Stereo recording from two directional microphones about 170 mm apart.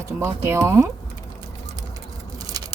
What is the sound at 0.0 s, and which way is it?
Speech, 15° right (ahead or behind).